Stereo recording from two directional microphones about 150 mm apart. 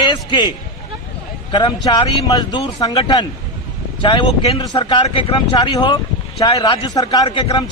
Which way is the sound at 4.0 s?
35° left (ahead or behind).